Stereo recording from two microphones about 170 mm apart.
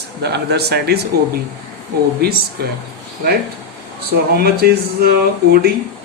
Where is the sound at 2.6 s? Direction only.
65° right (ahead or behind).